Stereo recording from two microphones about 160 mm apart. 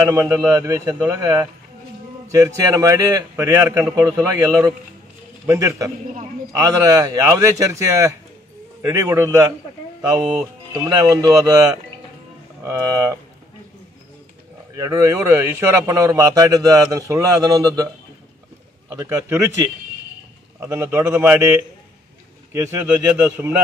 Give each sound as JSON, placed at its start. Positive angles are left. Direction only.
{"t": 0.0, "sound": "a man's voice", "side_deg": -20}
{"t": 10.7, "sound": "a man's voice", "side_deg": -20}
{"t": 14.8, "sound": "a man's voice", "side_deg": -15}
{"t": 18.9, "sound": "a man's voice", "side_deg": -15}